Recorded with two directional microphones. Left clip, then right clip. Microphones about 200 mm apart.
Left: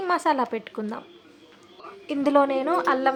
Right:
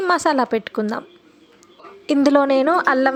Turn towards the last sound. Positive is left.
turn(degrees=-35)  # may be behind; listen again after turning